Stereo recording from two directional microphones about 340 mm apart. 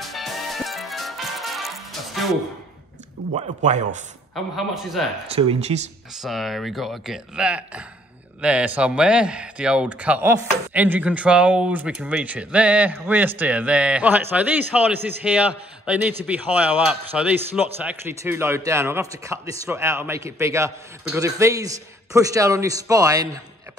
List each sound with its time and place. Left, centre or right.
0.0 s music: centre
3.3 s speech: right
4.6 s a man's voice: centre
5.3 s a man's voice: centre
6.2 s a man's voice: centre